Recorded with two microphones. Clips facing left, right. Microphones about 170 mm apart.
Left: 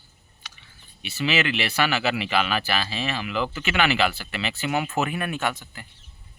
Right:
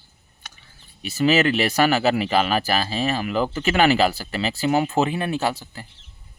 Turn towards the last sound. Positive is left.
turn(degrees=-30)  # may be behind; listen again after turning